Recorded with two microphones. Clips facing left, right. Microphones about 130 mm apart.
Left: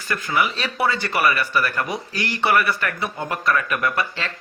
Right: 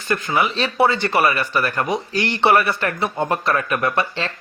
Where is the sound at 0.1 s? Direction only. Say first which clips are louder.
Right 3 dB; 25° right (ahead or behind).